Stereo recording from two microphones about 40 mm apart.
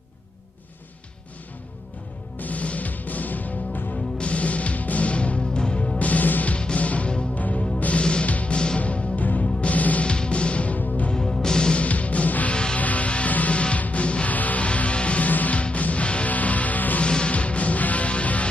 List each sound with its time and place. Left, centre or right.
2.3 s music: left
3.9 s music: left
5.9 s music: left
6.5 s music: left
8.3 s music: left
10.0 s music: left
11.1 s music: centre
11.8 s music: left
15.2 s music: left
17.0 s music: left